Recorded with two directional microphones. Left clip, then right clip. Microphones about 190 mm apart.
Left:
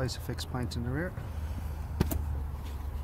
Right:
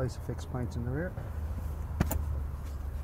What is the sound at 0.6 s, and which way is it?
Speech, 5° left (ahead or behind).